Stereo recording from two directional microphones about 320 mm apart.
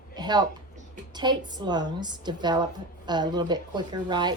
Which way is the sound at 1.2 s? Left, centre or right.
Centre.